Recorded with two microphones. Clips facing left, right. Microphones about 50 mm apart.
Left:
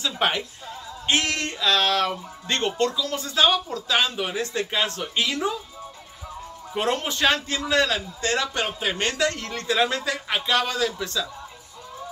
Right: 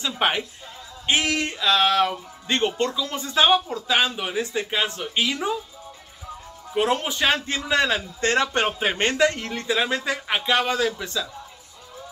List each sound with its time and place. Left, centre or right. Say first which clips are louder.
0.0 s speech: right 1 dB; centre
6.7 s speech: right 2 dB; centre
7.3 s a man's voice: even; right
8.2 s a man's voice: right 5 dB; right
9.5 s speech: even; centre